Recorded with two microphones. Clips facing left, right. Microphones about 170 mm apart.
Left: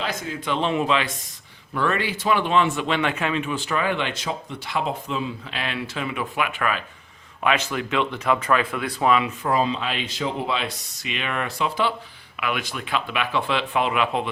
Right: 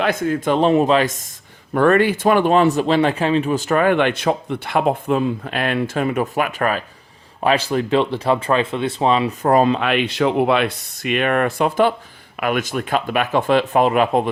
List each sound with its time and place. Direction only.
0.0 s speech: 55° right (ahead or behind); by 9.3 s 30° right (ahead or behind)
9.4 s speech: 50° right (ahead or behind)